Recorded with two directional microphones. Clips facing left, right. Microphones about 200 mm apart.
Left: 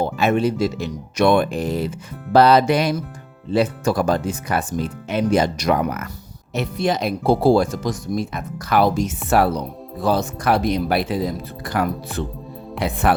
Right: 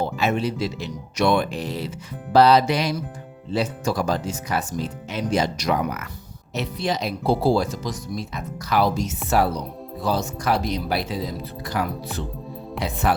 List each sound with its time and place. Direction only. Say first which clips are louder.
0.0 s speech: left 4 dB; 55° left (ahead or behind)